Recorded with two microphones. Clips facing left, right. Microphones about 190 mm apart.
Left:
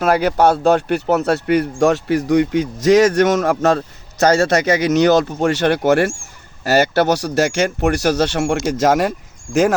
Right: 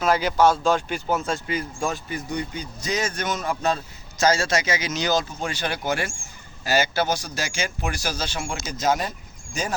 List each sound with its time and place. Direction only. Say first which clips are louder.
0.0 s speech: left 5 dB; 60° left (ahead or behind); by 9.1 s 90° left